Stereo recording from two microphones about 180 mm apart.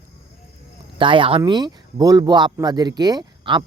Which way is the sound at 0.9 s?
30° right (ahead or behind).